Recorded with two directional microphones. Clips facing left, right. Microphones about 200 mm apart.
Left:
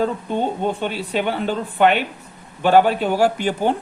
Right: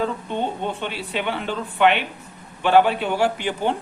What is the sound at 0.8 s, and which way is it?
A man's voice, 45° left (ahead or behind).